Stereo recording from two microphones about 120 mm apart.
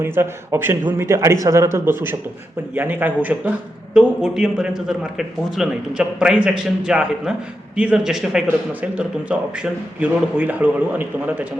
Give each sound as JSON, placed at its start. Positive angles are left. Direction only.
{"t": 0.0, "sound": "a man's voice", "side_deg": -20}